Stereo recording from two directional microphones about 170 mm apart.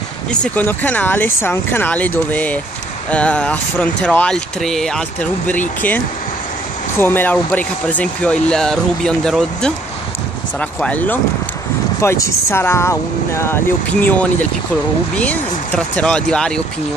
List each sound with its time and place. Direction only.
0.3 s speech: 10° left (ahead or behind)